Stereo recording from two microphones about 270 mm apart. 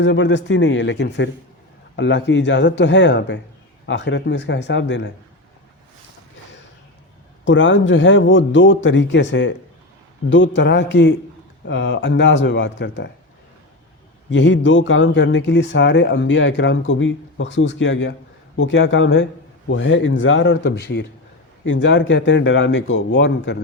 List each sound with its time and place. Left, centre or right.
0.0 s speech: left
7.4 s speech: left
14.3 s speech: left